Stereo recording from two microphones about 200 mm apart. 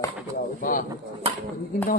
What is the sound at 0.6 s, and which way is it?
Speech, 40° left (ahead or behind).